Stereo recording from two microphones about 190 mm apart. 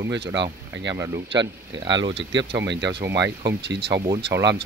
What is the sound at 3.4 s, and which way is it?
Speech, 65° right (ahead or behind).